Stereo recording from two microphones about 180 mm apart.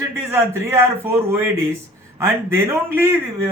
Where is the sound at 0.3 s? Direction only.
15° right (ahead or behind).